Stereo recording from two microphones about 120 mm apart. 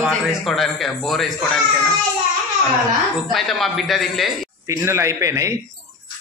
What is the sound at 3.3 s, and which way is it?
Speech, centre (ahead or behind).